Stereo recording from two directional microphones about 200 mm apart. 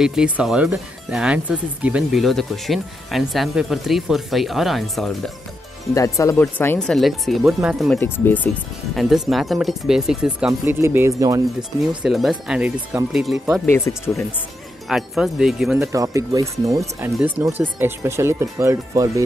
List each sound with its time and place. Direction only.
0.0 s speech: 5° right (ahead or behind)
5.9 s speech: 15° left (ahead or behind); by 8.0 s centre (ahead or behind)
8.0 s speech: 10° left (ahead or behind); by 11.4 s 15° right (ahead or behind)
12.0 s speech: centre (ahead or behind)
13.7 s speech: 10° left (ahead or behind)
14.9 s speech: centre (ahead or behind)
15.8 s speech: 15° right (ahead or behind)